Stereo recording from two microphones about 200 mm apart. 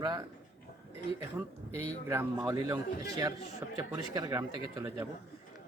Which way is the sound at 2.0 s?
15° right (ahead or behind).